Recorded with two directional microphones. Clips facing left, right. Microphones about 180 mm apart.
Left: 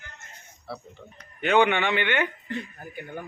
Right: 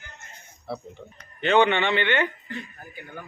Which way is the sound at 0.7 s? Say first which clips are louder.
Right 4 dB; 20° right (ahead or behind).